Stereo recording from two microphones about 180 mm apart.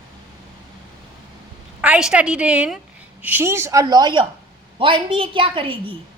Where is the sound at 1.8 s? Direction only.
5° right (ahead or behind).